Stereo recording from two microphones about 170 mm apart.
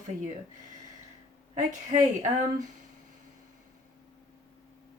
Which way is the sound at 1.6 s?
45° right (ahead or behind).